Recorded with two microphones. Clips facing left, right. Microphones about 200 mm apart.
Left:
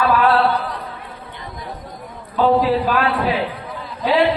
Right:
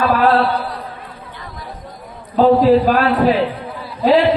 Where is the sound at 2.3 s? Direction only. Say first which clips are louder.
Right 5 dB; 40° right (ahead or behind).